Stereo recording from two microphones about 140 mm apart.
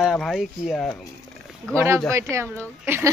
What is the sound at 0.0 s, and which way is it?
Speech, centre (ahead or behind).